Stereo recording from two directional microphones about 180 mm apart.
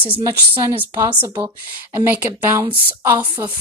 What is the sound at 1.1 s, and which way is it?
Speech, 25° right (ahead or behind).